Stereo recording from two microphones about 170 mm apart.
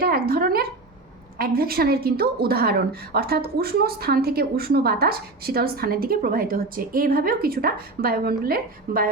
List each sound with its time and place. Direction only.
0.0 s a woman's voice: 60° right (ahead or behind)